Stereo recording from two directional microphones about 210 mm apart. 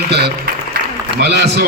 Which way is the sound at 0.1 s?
50° right (ahead or behind).